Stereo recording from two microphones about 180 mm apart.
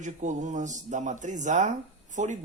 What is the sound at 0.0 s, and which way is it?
Speech, 45° right (ahead or behind).